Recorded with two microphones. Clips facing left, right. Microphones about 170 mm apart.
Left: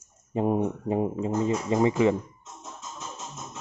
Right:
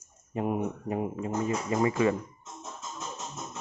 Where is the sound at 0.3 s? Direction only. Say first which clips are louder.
Left 5 dB; 30° left (ahead or behind).